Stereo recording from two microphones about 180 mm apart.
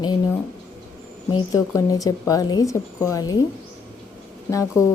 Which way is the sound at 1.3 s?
20° left (ahead or behind).